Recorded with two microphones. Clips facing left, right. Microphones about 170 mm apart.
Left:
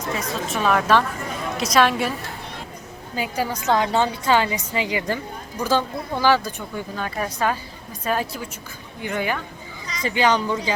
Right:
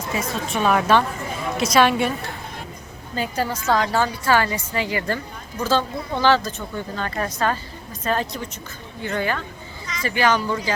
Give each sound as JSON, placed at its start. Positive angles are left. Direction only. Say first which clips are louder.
{"t": 0.1, "sound": "a woman's voice", "louder": "right 1 dB", "side_deg": 0}
{"t": 3.2, "sound": "a woman's voice", "louder": "right 1 dB", "side_deg": 10}